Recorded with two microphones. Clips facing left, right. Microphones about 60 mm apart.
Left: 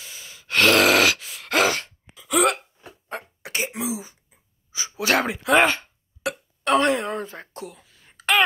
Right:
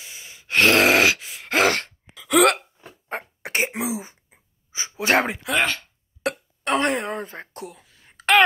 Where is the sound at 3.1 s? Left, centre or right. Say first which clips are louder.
Right 4 dB; right.